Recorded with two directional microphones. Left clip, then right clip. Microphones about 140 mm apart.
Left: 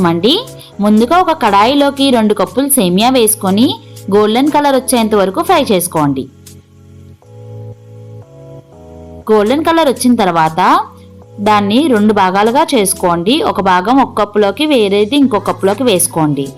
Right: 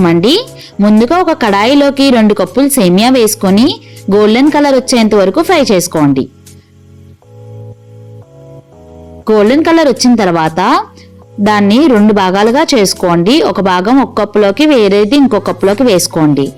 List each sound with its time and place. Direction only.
0.0 s a woman's voice: 50° right (ahead or behind)
9.2 s a woman's voice: 40° right (ahead or behind)